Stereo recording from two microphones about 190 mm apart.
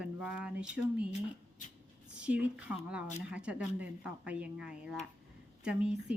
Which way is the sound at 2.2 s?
5° right (ahead or behind).